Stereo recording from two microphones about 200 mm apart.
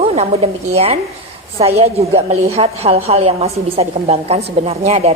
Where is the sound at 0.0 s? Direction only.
30° right (ahead or behind).